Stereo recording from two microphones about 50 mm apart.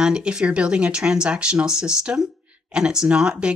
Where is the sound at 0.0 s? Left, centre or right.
Centre.